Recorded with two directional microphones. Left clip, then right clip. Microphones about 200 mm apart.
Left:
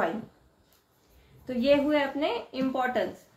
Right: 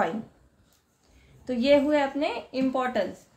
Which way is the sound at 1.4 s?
40° right (ahead or behind).